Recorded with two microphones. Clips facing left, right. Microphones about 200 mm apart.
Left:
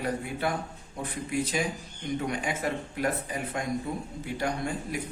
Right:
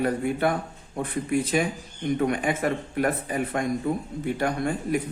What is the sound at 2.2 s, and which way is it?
A man's voice, 55° right (ahead or behind).